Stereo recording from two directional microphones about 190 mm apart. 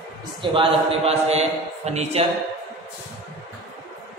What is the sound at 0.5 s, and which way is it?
A man's voice, 30° right (ahead or behind).